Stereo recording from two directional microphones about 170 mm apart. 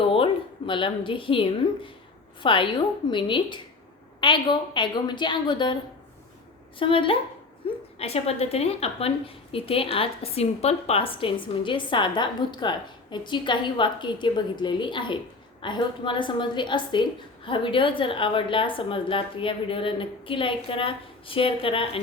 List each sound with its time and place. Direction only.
0.0 s a sound: 35° left (ahead or behind)
0.7 s a woman's voice: 30° left (ahead or behind)
6.7 s a woman's voice: 30° left (ahead or behind)